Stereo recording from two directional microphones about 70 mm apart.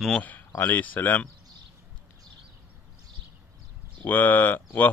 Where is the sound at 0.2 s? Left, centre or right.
Left.